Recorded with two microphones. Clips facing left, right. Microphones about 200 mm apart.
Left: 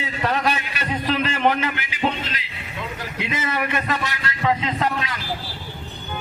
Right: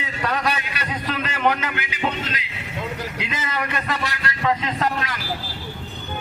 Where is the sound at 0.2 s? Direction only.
25° left (ahead or behind).